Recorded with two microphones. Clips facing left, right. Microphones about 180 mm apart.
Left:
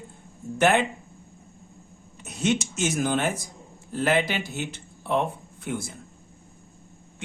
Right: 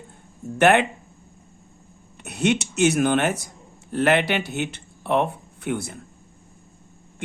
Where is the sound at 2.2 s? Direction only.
65° right (ahead or behind).